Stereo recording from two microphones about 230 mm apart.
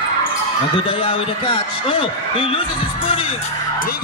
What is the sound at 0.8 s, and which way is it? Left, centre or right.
A man's voice, left.